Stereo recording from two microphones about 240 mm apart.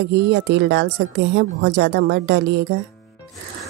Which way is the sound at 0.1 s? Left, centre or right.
Right.